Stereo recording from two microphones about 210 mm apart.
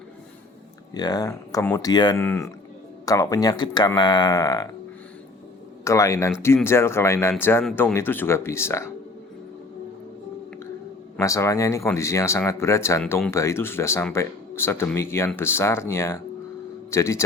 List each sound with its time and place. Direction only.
0.9 s speech: 20° left (ahead or behind)
2.2 s speech: 10° left (ahead or behind)
5.8 s speech: 15° left (ahead or behind)
11.2 s speech: 15° left (ahead or behind)